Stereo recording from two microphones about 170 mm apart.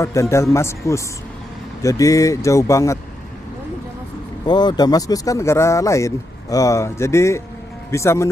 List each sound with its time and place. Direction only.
0.0 s speech: 15° left (ahead or behind)
4.5 s speech: 25° left (ahead or behind)